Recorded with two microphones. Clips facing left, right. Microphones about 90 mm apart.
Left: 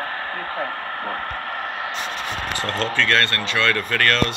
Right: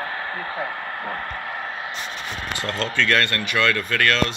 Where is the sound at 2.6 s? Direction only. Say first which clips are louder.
Left 1 dB; centre (ahead or behind).